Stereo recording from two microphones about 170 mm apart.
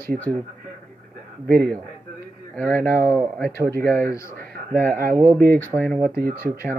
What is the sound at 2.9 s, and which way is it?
Speech, 10° left (ahead or behind).